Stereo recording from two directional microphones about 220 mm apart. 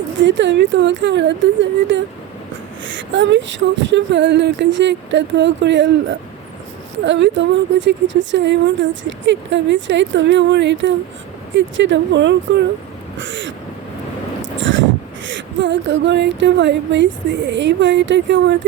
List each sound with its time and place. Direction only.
0.2 s a woman's voice: 55° right (ahead or behind)
14.6 s speech: 55° right (ahead or behind)